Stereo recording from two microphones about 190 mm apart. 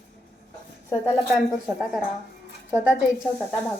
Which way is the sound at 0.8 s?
10° left (ahead or behind).